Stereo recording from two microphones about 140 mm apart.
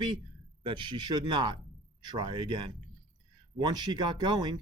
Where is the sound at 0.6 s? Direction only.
35° right (ahead or behind).